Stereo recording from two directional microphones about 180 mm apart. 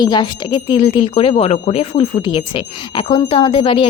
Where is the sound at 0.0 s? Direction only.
25° left (ahead or behind).